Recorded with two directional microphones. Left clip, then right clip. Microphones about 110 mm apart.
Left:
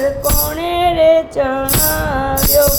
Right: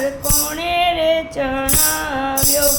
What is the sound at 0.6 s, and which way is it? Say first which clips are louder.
Female singing: left 5 dB; 45° left (ahead or behind).